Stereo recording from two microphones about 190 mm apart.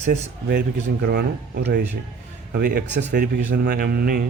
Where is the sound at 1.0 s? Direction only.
60° right (ahead or behind).